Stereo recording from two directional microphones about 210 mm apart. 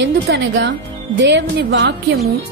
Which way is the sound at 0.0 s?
55° right (ahead or behind).